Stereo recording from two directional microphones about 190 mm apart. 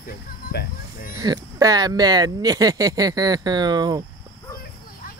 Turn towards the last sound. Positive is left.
turn(degrees=-20)  # may be behind; listen again after turning